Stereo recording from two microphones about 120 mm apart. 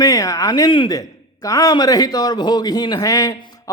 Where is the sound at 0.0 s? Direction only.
30° left (ahead or behind).